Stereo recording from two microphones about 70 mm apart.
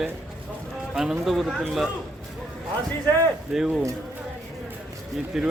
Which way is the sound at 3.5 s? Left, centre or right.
Centre.